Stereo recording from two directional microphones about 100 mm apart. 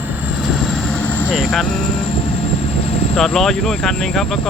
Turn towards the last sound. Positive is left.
turn(degrees=5)  # may be behind; listen again after turning